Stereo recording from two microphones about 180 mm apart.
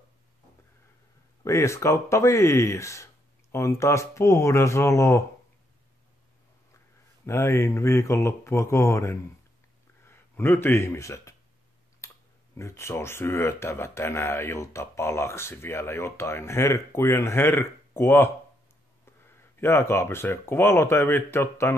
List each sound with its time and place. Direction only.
1.4 s speech: 15° left (ahead or behind)
7.2 s speech: 15° left (ahead or behind)
12.5 s speech: 15° left (ahead or behind)
19.6 s speech: 15° left (ahead or behind)